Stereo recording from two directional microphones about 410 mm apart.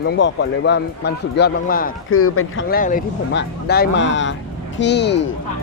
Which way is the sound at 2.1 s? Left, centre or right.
Left.